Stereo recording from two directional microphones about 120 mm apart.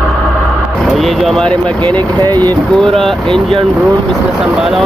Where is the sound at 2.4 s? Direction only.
10° left (ahead or behind).